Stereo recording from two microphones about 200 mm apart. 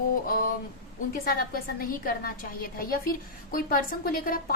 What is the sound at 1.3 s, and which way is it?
Speech, 45° left (ahead or behind).